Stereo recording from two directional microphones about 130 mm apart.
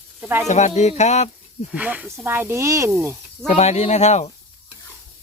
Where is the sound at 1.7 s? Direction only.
10° right (ahead or behind).